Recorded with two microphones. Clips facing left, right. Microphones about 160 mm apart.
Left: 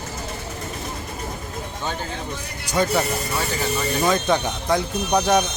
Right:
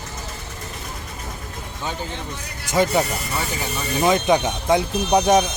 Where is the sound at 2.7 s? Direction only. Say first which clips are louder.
Right 2 dB; 20° right (ahead or behind).